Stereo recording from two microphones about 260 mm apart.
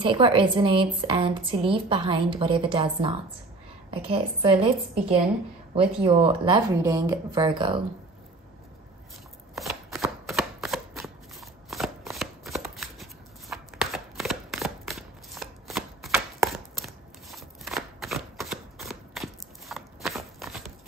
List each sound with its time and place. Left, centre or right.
0.0 s speech: centre
9.6 s a sound: centre
11.7 s shuffling cards: centre